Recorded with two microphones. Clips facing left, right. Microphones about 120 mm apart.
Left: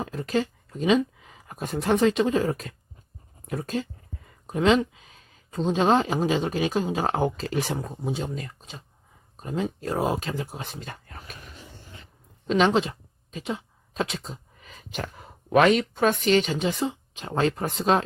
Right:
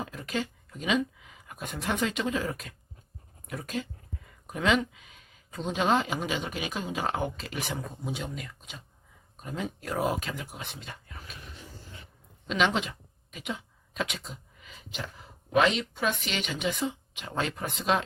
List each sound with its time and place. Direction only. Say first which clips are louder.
0.0 s speech: left 7 dB; 35° left (ahead or behind)
12.5 s speech: left 6 dB; 35° left (ahead or behind)